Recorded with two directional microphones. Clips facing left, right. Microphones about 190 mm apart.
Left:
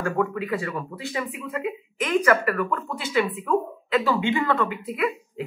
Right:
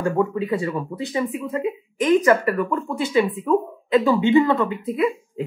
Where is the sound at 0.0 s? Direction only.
20° right (ahead or behind).